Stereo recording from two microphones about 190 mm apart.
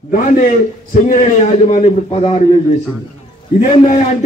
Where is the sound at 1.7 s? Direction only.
35° left (ahead or behind).